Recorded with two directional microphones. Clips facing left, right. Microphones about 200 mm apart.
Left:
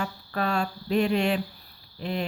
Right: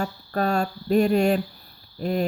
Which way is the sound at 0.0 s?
40° right (ahead or behind).